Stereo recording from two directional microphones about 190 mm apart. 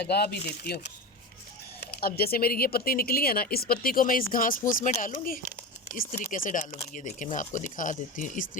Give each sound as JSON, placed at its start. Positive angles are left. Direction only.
{"t": 0.0, "sound": "speech", "side_deg": 60}
{"t": 1.8, "sound": "speech", "side_deg": 55}